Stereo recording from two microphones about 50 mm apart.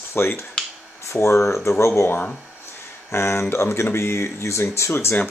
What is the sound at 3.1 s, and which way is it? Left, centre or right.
Speech, left.